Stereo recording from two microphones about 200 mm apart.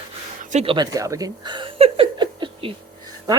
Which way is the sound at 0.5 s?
25° right (ahead or behind).